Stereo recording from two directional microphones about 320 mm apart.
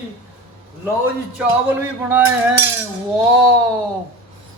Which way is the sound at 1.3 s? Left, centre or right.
Centre.